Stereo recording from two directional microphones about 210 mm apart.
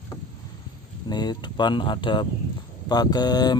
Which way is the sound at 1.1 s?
20° left (ahead or behind).